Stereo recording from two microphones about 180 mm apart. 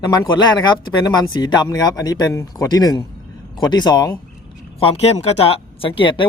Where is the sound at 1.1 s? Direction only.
20° left (ahead or behind).